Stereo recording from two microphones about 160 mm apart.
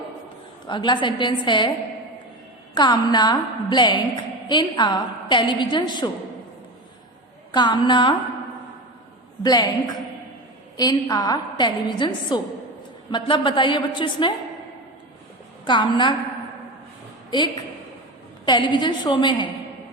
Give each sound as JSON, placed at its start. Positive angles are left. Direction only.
{"t": 0.7, "sound": "a woman's voice", "side_deg": 30}
{"t": 2.7, "sound": "a woman's voice", "side_deg": 25}
{"t": 7.5, "sound": "a woman's voice", "side_deg": 30}
{"t": 9.4, "sound": "a woman's voice", "side_deg": 25}
{"t": 15.6, "sound": "a woman's voice", "side_deg": 30}
{"t": 17.3, "sound": "a woman's voice", "side_deg": 30}